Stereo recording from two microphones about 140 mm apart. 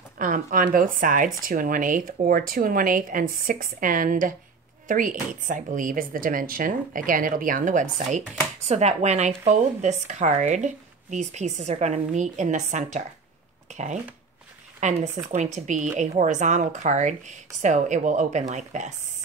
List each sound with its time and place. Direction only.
0.2 s speech: 70° right (ahead or behind)